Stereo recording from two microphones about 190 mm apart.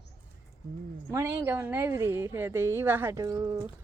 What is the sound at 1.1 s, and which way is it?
Speech, 15° right (ahead or behind).